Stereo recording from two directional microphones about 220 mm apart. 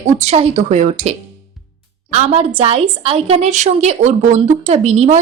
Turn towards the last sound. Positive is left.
turn(degrees=-30)  # may be behind; listen again after turning